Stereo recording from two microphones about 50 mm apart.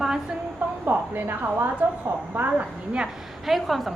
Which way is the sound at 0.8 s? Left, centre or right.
Right.